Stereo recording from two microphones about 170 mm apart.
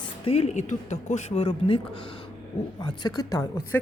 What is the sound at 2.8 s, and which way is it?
A woman's voice, 25° left (ahead or behind).